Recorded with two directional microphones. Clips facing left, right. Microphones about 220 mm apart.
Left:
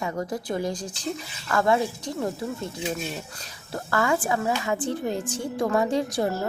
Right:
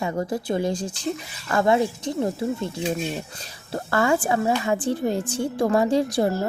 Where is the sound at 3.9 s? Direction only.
30° right (ahead or behind).